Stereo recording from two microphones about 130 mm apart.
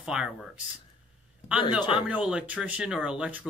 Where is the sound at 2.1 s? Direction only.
10° right (ahead or behind).